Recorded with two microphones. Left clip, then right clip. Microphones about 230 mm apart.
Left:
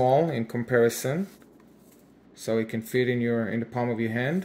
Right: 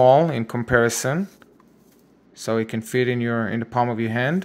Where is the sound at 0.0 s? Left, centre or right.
Right.